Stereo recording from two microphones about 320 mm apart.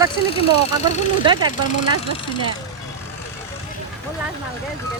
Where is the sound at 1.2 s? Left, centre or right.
Centre.